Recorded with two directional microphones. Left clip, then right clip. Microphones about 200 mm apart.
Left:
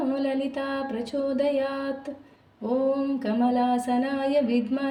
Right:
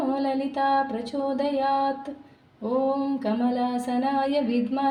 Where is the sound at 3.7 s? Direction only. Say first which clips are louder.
Even; 25° left (ahead or behind).